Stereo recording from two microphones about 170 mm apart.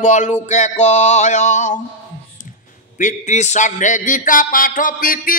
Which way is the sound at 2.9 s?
45° left (ahead or behind).